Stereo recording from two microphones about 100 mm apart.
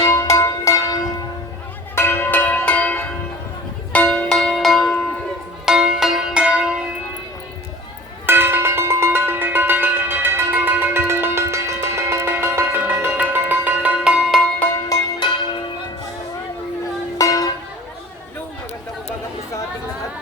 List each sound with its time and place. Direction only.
0.0 s music: 30° left (ahead or behind)
2.0 s church bell: 25° left (ahead or behind)
3.9 s music: 10° left (ahead or behind); by 6.7 s 10° right (ahead or behind)
8.3 s cowbell: 20° right (ahead or behind)
14.8 s music: 45° left (ahead or behind)
17.2 s music: 35° left (ahead or behind)